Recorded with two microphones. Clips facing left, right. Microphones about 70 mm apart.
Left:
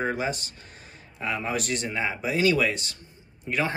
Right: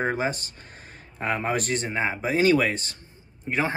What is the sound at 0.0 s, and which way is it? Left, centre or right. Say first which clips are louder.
Speech: right 2 dB; right.